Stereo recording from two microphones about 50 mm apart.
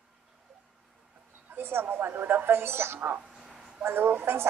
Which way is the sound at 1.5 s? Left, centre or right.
Right.